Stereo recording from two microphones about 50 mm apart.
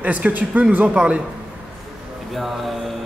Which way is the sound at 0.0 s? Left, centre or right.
Right.